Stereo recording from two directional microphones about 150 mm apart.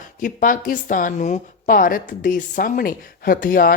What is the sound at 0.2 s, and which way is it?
Speech, 60° left (ahead or behind).